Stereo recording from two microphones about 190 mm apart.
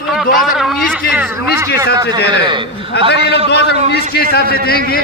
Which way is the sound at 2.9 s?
65° left (ahead or behind).